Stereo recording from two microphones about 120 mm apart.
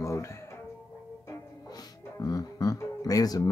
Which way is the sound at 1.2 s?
30° left (ahead or behind).